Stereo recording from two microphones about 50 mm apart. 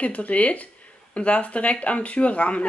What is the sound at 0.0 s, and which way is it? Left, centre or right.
Speech, left.